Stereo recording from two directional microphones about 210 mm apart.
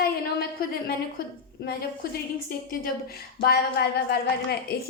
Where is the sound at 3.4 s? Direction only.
50° left (ahead or behind).